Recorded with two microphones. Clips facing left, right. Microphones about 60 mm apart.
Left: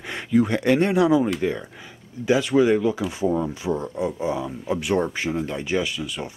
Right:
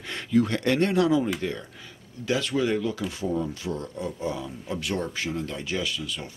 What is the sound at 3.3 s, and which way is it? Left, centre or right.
Speech, left.